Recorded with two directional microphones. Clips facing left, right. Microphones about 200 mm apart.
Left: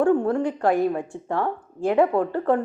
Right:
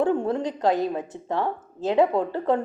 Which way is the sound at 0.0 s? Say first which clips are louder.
Left 3 dB; 20° right (ahead or behind).